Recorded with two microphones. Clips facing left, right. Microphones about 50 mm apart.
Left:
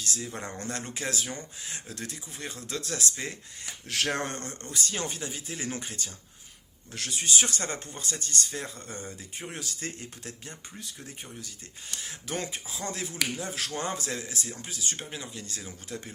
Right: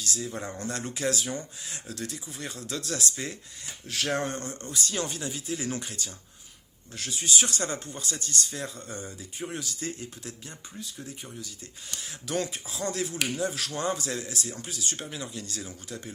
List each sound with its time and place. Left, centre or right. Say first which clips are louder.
0.0 s speech: right 2 dB; left
0.9 s a man's voice: right 4 dB; left
3.8 s speech: right 1 dB; left
4.9 s a man's voice: right 2 dB; left
6.9 s speech: left 1 dB; left
7.3 s speech: right 1 dB; left
12.3 s a man's voice: right 4 dB; left